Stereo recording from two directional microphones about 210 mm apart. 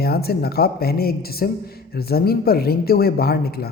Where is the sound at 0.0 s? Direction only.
50° left (ahead or behind).